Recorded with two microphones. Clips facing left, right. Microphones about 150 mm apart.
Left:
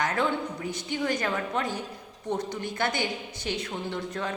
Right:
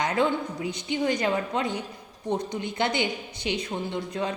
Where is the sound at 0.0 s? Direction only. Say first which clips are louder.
Right 2 dB; 15° right (ahead or behind).